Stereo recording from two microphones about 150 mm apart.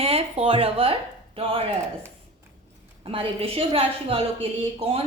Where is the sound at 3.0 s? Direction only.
40° right (ahead or behind).